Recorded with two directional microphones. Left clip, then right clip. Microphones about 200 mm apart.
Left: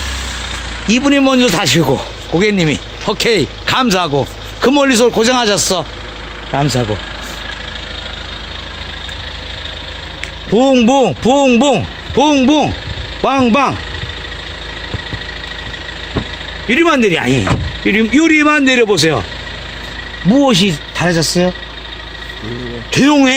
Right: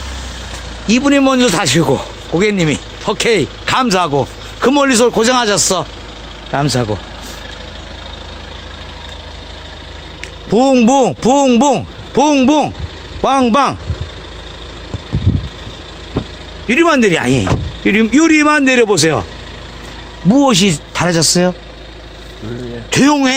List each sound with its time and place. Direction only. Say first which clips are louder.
0.9 s speech: even; centre (ahead or behind)
6.5 s speech: even; 10° right (ahead or behind)
10.5 s speech: even; 20° right (ahead or behind)
16.6 s speech: even; 10° right (ahead or behind)
20.3 s speech: even; 30° right (ahead or behind)
22.9 s speech: even; 40° right (ahead or behind)